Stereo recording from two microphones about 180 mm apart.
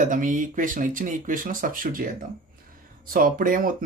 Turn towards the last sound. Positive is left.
turn(degrees=-50)  # may be behind; listen again after turning